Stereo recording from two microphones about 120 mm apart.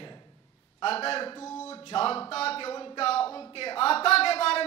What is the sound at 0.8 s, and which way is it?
A man's voice, 55° left (ahead or behind).